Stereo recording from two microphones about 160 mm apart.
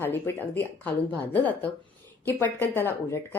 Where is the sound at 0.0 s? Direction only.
15° left (ahead or behind).